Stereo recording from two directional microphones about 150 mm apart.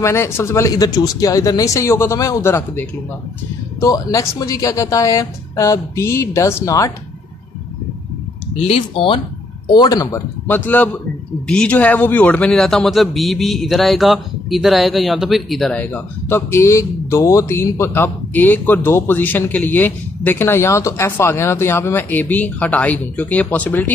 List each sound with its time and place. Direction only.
0.0 s a woman's voice: 15° left (ahead or behind)
8.5 s speech: 40° left (ahead or behind)
9.8 s a man's voice: 20° left (ahead or behind)